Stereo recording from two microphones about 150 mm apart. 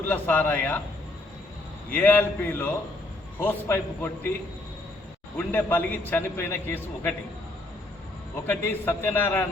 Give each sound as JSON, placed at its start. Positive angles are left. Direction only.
{"t": 0.0, "sound": "a man's voice", "side_deg": 10}
{"t": 1.9, "sound": "a man's voice", "side_deg": 10}
{"t": 5.5, "sound": "a man's voice", "side_deg": 15}
{"t": 8.4, "sound": "a man's voice", "side_deg": 15}